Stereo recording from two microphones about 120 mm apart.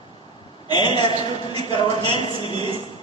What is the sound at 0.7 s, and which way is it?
A man's voice, 40° left (ahead or behind).